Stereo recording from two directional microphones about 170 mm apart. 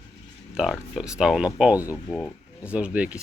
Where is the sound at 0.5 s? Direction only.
Centre (ahead or behind).